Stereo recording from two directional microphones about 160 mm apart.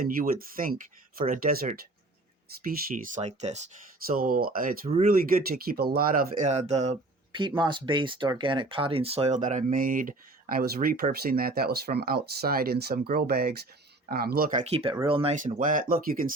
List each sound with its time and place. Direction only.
0.0 s speech: 60° right (ahead or behind)
3.2 s speech: 45° right (ahead or behind)
4.0 s speech: 65° right (ahead or behind)
14.6 s speech: 40° right (ahead or behind)
15.4 s speech: 55° right (ahead or behind)